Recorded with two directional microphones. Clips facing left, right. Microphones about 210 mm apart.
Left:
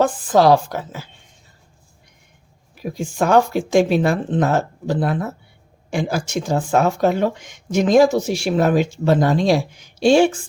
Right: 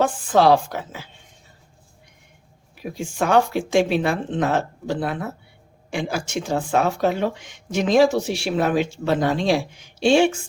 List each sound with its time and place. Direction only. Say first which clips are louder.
0.0 s speech: left 2 dB; 40° left (ahead or behind)
2.8 s speech: left 3 dB; 40° left (ahead or behind)